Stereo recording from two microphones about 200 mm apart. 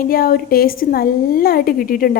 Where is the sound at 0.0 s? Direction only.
45° left (ahead or behind).